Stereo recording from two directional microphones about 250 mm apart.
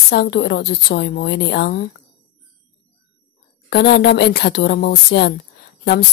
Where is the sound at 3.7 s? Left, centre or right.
Left.